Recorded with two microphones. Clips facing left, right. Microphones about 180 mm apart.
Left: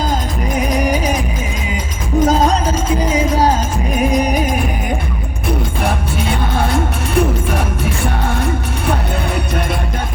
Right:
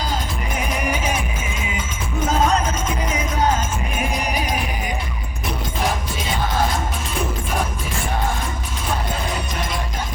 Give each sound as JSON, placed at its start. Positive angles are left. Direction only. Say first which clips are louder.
{"t": 0.7, "sound": "music", "louder": "left 6 dB", "side_deg": 40}
{"t": 2.2, "sound": "music", "louder": "left 4 dB", "side_deg": 35}
{"t": 5.8, "sound": "music", "louder": "left 5 dB", "side_deg": 65}
{"t": 8.9, "sound": "music", "louder": "left 5 dB", "side_deg": 65}